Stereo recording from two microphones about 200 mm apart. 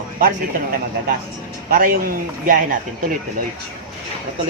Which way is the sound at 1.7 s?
45° right (ahead or behind).